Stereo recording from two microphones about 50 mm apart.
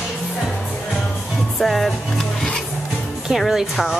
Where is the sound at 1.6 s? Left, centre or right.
Centre.